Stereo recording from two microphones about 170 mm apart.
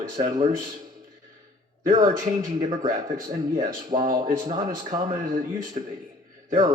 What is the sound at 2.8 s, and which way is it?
Speech, 55° right (ahead or behind).